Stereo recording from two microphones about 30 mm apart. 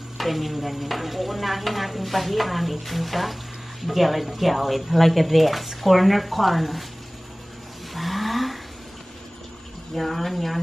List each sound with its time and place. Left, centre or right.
0.2 s stir: centre
7.9 s vehicle: centre
9.9 s stir: centre